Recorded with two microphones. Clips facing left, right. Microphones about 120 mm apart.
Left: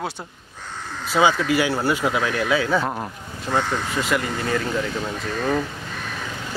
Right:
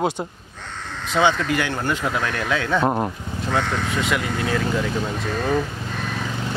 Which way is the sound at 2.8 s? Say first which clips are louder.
Right 6 dB; 25° right (ahead or behind).